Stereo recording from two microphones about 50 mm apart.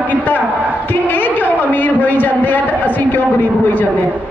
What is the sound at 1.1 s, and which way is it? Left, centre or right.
A man's voice, left.